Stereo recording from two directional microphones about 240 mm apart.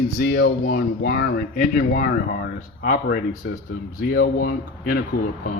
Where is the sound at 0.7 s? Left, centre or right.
Left.